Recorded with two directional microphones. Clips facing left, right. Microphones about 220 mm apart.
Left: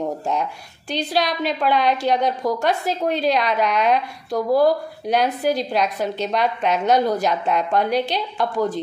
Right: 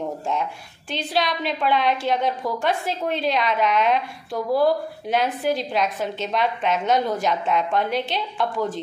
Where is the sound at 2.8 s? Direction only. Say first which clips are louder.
Left 4 dB; 40° left (ahead or behind).